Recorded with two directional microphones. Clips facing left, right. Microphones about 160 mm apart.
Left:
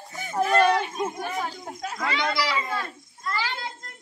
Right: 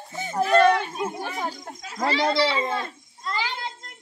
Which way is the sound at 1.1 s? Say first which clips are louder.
Even; 35° right (ahead or behind).